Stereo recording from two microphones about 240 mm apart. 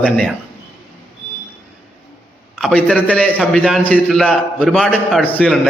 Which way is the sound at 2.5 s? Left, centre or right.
Centre.